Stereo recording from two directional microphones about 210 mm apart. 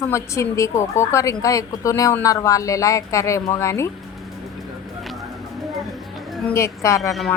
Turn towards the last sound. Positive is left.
turn(degrees=0)  # may be behind; listen again after turning